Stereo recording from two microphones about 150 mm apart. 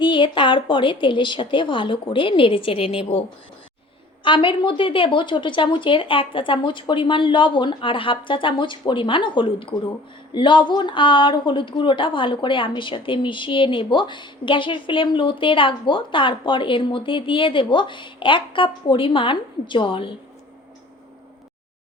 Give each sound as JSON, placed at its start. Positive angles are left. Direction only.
{"t": 0.0, "sound": "speech", "side_deg": 35}